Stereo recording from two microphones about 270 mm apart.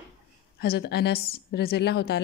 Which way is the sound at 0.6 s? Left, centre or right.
Left.